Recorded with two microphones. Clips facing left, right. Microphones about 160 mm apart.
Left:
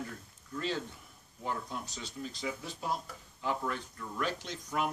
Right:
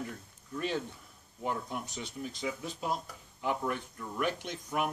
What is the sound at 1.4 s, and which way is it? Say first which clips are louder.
Speech: right 2 dB; 15° right (ahead or behind).